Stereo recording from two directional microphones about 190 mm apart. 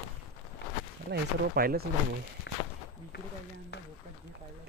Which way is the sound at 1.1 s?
55° right (ahead or behind).